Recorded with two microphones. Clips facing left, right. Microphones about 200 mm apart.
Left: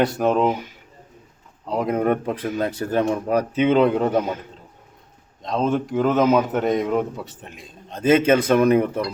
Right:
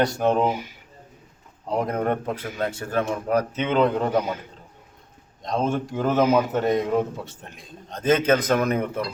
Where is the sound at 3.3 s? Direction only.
10° left (ahead or behind).